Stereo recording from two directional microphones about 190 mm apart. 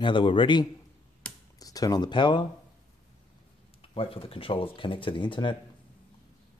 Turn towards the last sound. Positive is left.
turn(degrees=25)  # may be behind; listen again after turning